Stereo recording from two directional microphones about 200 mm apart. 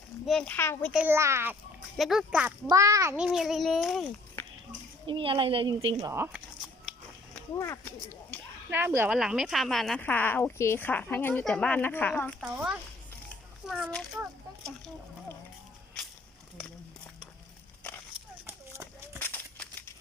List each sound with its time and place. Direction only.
0.3 s speech: 5° left (ahead or behind)
0.9 s a child's voice: 10° right (ahead or behind)
2.0 s a child's voice: centre (ahead or behind)
2.6 s a child's voice: 15° right (ahead or behind)
3.2 s a child's voice: centre (ahead or behind)
4.4 s a sound: 10° left (ahead or behind)
5.0 s a child's voice: 25° right (ahead or behind)
7.5 s speech: 15° left (ahead or behind)
8.7 s speech: 10° right (ahead or behind); by 12.5 s 10° left (ahead or behind)
12.5 s a child's voice: 5° right (ahead or behind)
18.4 s clip-clop: 15° right (ahead or behind)
19.2 s a sound: 10° left (ahead or behind)